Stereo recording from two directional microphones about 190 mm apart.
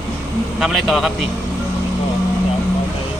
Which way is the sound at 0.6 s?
Centre (ahead or behind).